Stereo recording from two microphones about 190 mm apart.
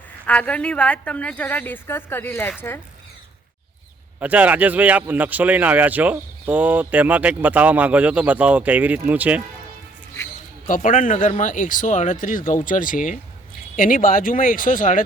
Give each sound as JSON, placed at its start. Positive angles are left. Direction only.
{"t": 0.3, "sound": "a woman's voice", "side_deg": 5}
{"t": 4.2, "sound": "speech", "side_deg": -10}
{"t": 10.7, "sound": "speech", "side_deg": 40}